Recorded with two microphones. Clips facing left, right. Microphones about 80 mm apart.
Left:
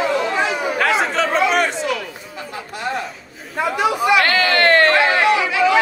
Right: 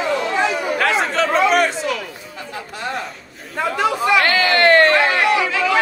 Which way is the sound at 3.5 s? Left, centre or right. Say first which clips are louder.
Left 1 dB; centre.